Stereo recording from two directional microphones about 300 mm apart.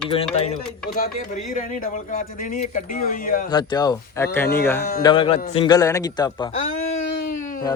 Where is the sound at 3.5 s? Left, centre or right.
Centre.